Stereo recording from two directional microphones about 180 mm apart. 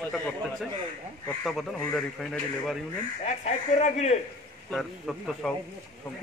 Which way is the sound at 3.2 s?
40° left (ahead or behind).